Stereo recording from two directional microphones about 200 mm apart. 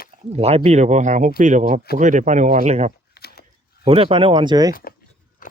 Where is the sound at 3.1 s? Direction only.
50° left (ahead or behind).